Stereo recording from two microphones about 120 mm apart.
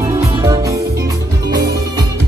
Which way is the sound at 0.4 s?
30° right (ahead or behind).